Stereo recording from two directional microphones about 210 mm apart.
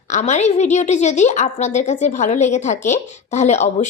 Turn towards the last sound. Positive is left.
turn(degrees=35)  # may be behind; listen again after turning